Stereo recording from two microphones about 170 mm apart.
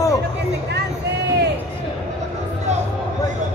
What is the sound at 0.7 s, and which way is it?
Speech, 75° right (ahead or behind).